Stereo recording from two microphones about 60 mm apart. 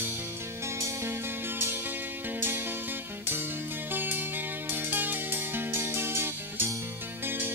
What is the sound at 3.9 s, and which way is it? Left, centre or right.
Music, right.